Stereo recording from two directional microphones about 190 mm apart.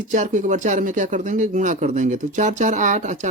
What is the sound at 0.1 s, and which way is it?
Speech, 40° right (ahead or behind).